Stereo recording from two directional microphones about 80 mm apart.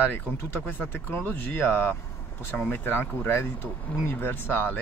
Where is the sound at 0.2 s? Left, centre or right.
Left.